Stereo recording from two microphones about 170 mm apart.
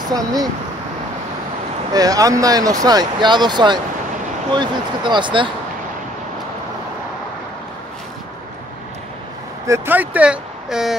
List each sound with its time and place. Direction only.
0.1 s speech: 20° right (ahead or behind)
1.9 s speech: 20° right (ahead or behind)
9.7 s speech: 10° right (ahead or behind)